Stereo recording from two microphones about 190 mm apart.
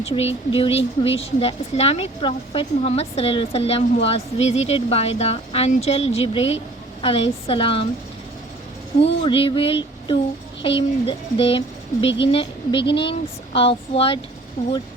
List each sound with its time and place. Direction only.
0.0 s speech: 30° left (ahead or behind)
9.2 s speech: 30° left (ahead or behind)